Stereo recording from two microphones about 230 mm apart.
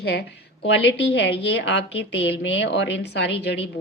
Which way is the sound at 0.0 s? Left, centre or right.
Left.